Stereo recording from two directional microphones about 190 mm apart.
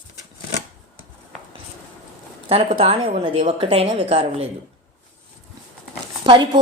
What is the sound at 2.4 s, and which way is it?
A woman's voice, 30° right (ahead or behind).